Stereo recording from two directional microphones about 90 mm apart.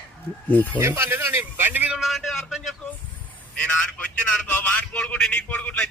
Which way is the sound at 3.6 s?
10° left (ahead or behind).